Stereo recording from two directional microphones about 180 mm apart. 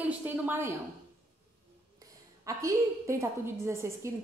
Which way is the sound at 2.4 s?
15° right (ahead or behind).